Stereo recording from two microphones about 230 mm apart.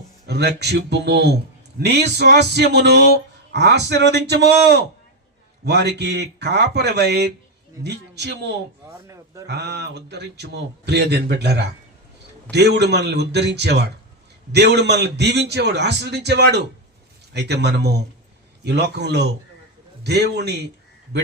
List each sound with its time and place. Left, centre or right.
0.3 s a man's voice: right
9.0 s a man's voice: centre
9.5 s a man's voice: right